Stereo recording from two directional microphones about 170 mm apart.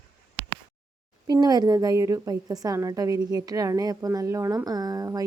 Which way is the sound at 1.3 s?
20° right (ahead or behind).